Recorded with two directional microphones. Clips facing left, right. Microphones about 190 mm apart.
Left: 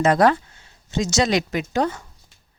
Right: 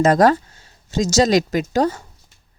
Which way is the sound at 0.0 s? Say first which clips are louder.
Right 3 dB; 40° right (ahead or behind).